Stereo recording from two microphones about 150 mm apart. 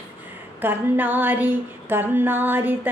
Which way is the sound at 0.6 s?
15° right (ahead or behind).